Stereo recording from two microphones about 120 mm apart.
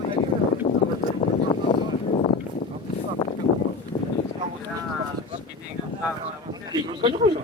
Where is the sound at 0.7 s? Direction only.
45° left (ahead or behind).